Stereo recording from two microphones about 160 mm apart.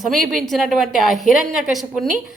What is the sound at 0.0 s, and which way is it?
A woman's voice, centre (ahead or behind).